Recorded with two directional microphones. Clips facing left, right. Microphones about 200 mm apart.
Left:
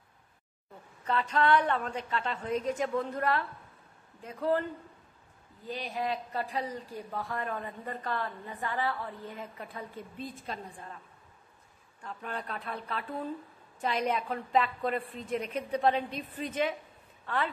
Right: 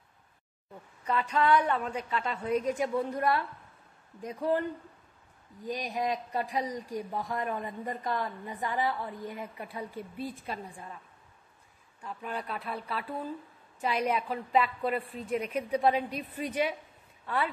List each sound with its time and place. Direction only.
1.0 s speech: 10° right (ahead or behind)
5.7 s speech: 15° right (ahead or behind)
12.0 s speech: 5° right (ahead or behind)